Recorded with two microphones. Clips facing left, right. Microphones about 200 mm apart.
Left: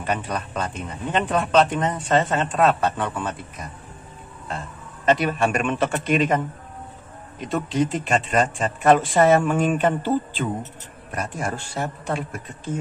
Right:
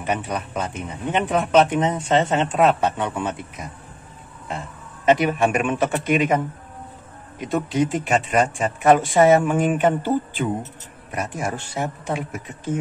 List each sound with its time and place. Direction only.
0.0 s speech: 10° right (ahead or behind)
11.5 s speech: 20° right (ahead or behind)